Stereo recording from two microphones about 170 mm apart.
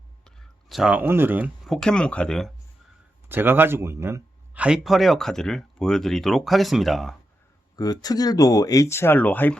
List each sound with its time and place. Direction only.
0.3 s a sound: centre (ahead or behind)
1.7 s speech: 5° left (ahead or behind)
3.2 s speech: 10° right (ahead or behind)
7.8 s speech: 20° left (ahead or behind)